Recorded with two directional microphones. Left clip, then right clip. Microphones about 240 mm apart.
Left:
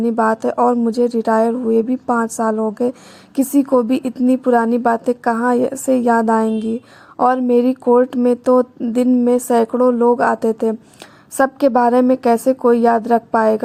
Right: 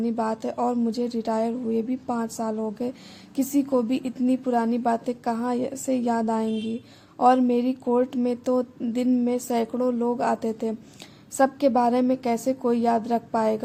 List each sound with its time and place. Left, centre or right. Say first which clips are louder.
0.0 s speech: left 11 dB; left